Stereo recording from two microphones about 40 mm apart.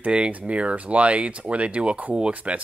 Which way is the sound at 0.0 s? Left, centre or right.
Right.